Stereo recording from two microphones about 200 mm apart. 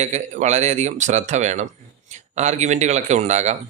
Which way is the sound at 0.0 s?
35° right (ahead or behind).